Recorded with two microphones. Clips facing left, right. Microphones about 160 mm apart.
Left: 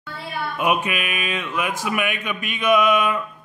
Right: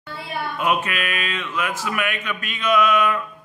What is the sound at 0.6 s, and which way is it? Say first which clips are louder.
Speech: left 1 dB; 15° left (ahead or behind).